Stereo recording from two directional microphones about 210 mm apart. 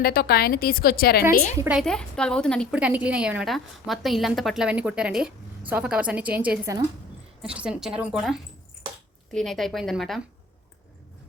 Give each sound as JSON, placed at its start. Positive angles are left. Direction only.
{"t": 0.0, "sound": "a woman's voice", "side_deg": 45}
{"t": 1.5, "sound": "a woman's voice", "side_deg": -10}
{"t": 1.8, "sound": "a woman's voice", "side_deg": 5}